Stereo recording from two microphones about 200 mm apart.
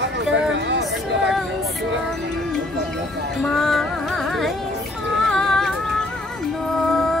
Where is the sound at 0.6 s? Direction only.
60° right (ahead or behind).